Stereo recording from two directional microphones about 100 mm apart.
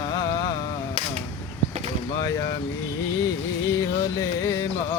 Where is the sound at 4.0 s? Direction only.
30° left (ahead or behind).